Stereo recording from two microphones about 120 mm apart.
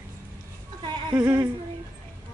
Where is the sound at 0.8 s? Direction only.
35° right (ahead or behind).